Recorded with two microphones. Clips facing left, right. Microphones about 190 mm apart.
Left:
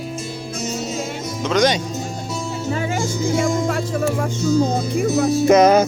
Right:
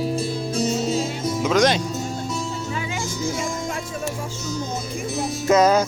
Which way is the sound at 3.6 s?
65° left (ahead or behind).